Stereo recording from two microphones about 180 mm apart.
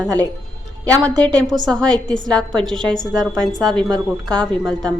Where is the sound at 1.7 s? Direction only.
5° left (ahead or behind).